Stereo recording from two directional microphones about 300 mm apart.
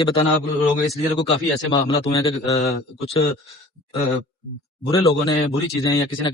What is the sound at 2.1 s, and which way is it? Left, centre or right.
Speech, centre.